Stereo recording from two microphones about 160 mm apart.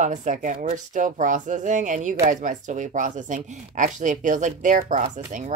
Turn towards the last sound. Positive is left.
turn(degrees=-50)  # may be behind; listen again after turning